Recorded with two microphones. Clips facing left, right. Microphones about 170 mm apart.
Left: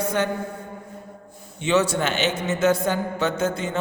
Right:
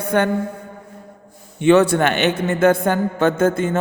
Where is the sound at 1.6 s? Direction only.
55° right (ahead or behind).